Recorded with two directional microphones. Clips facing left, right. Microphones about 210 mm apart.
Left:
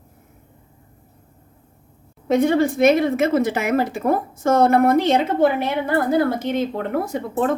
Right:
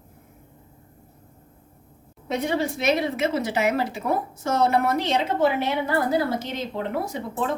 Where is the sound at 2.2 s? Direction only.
50° left (ahead or behind).